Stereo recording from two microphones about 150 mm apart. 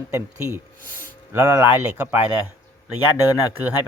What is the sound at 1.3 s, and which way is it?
A man's voice, 15° right (ahead or behind).